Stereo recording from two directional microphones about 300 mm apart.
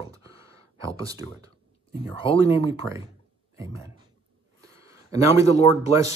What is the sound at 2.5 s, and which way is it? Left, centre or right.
Speech, centre.